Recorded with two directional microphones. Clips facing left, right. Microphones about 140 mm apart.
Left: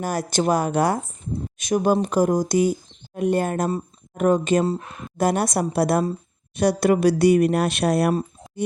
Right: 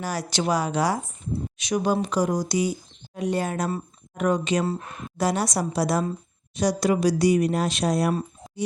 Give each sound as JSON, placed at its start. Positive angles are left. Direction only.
{"t": 0.0, "sound": "speech", "side_deg": 50}